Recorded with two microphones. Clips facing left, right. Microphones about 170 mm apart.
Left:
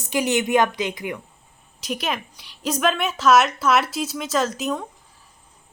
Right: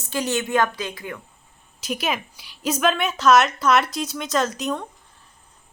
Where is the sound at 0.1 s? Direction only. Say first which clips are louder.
Left 3 dB; 15° left (ahead or behind).